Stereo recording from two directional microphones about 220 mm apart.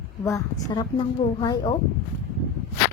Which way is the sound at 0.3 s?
15° left (ahead or behind).